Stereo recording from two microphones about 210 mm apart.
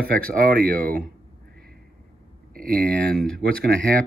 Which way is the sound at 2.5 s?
45° right (ahead or behind).